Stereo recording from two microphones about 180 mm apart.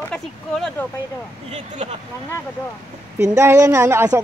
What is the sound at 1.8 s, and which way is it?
Speech, 35° right (ahead or behind).